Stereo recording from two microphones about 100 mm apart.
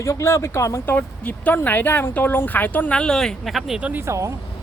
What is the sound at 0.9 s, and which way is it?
Speech, 15° left (ahead or behind).